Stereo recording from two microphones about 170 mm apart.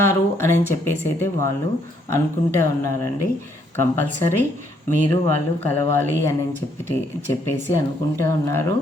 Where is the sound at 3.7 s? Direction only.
15° left (ahead or behind).